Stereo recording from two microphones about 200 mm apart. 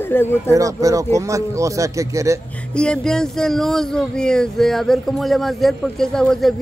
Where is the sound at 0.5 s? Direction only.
15° right (ahead or behind).